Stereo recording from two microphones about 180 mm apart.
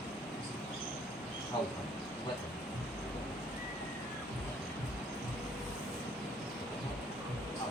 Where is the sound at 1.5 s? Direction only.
25° left (ahead or behind).